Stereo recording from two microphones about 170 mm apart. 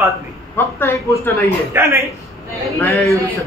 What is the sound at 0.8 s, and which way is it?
Speech, 15° left (ahead or behind).